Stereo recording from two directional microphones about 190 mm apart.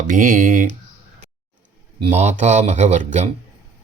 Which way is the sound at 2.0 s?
35° right (ahead or behind).